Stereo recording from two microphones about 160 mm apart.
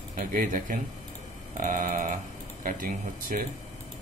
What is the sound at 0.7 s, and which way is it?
Sheep, 60° right (ahead or behind).